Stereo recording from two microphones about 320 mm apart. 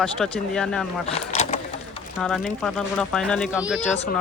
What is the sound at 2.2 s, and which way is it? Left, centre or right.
Speech, centre.